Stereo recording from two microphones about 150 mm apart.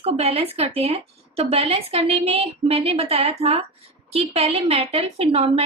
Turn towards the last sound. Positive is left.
turn(degrees=-40)  # may be behind; listen again after turning